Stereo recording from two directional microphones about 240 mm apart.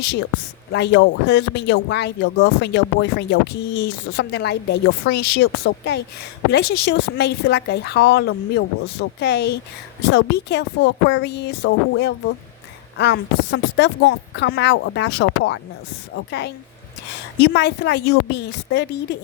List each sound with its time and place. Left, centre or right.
0.7 s speech: left